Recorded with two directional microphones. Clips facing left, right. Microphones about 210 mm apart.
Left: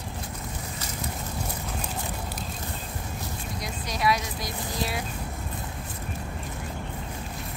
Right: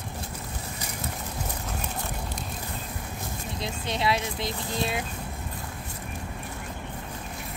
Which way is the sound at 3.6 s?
25° right (ahead or behind).